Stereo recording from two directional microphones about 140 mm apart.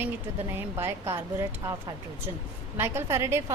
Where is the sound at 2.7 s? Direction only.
15° right (ahead or behind).